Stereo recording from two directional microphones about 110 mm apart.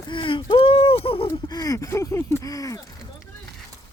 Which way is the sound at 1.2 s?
35° left (ahead or behind).